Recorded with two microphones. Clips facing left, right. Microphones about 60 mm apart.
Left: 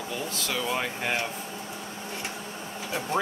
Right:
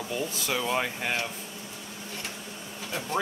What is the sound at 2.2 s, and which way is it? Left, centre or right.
Printer, left.